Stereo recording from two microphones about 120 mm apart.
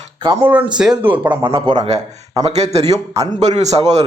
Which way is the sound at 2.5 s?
65° right (ahead or behind).